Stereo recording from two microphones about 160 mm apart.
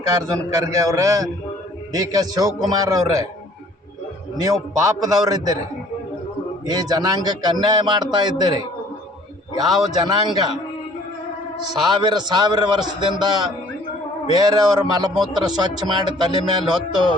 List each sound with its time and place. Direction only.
0.2 s speech: 20° right (ahead or behind)
4.8 s speech: 25° right (ahead or behind)
6.7 s speech: 25° right (ahead or behind)
9.6 s speech: 25° right (ahead or behind)
11.8 s speech: 30° right (ahead or behind)